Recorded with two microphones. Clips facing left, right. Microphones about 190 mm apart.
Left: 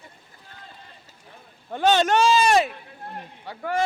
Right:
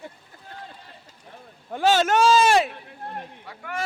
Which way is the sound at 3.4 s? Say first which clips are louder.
Left 10 dB; 30° left (ahead or behind).